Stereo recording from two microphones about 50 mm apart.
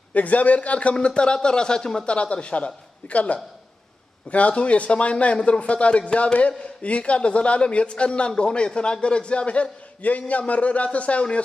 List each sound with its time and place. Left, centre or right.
0.1 s speech: left; by 2.1 s centre
2.1 s speech: left